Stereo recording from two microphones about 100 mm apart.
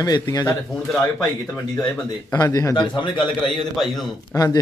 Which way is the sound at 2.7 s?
50° left (ahead or behind).